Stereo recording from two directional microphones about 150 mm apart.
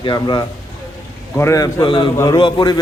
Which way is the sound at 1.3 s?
20° left (ahead or behind).